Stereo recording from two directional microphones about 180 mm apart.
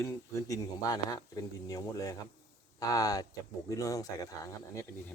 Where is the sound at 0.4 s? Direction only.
20° left (ahead or behind).